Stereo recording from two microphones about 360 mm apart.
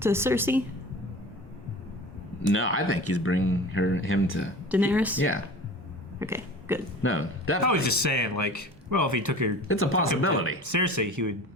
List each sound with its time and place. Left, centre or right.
0.0 s a woman's voice: centre
2.5 s speech: left
4.7 s speech: centre
6.1 s burping: centre
7.0 s speech: left
7.6 s speech: right
9.6 s speech: left
10.6 s speech: right